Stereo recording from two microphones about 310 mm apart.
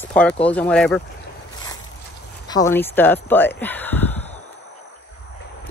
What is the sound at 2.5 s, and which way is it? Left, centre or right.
Speech, centre.